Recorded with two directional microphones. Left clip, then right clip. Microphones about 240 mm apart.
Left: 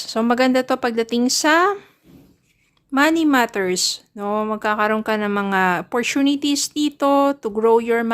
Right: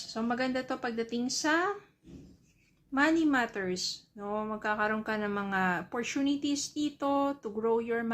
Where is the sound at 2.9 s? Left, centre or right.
Left.